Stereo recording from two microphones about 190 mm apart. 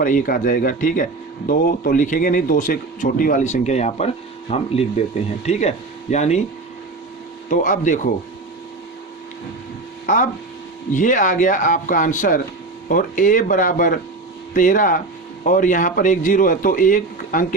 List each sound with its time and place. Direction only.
0.0 s speech: 45° left (ahead or behind)
7.5 s speech: 45° left (ahead or behind)
10.9 s speech: 45° left (ahead or behind)